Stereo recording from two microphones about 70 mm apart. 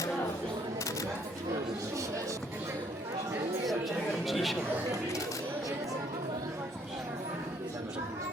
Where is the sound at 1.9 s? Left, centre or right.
Right.